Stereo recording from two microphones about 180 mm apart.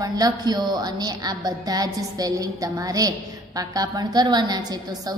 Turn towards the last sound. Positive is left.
turn(degrees=-20)  # may be behind; listen again after turning